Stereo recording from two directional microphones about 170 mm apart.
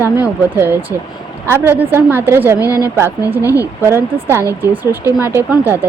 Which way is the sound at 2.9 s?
10° right (ahead or behind).